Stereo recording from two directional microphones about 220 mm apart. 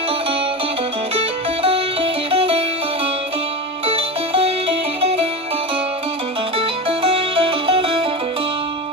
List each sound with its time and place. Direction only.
1.6 s music: 25° right (ahead or behind)
3.8 s music: 25° right (ahead or behind)
6.6 s music: 25° right (ahead or behind)